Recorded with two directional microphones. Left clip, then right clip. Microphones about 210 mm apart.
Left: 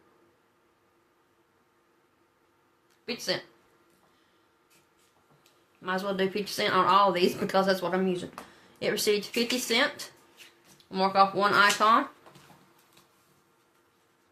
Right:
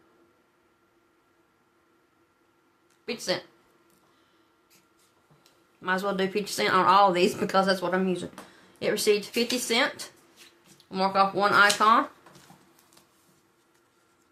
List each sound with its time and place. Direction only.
3.1 s speech: 20° right (ahead or behind)
5.8 s speech: 25° right (ahead or behind)